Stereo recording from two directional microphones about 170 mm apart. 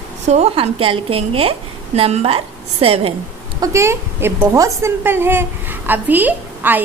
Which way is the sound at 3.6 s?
15° right (ahead or behind).